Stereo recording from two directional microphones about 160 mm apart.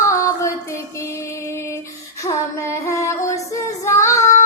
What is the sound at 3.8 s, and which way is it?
Child singing, 20° left (ahead or behind).